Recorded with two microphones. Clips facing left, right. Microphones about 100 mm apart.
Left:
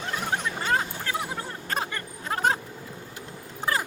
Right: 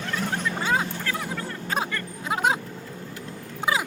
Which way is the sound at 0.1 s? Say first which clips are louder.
Right 1 dB; 15° left (ahead or behind).